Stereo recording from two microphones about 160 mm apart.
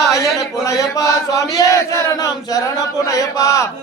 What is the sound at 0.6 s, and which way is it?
Chant, 20° left (ahead or behind).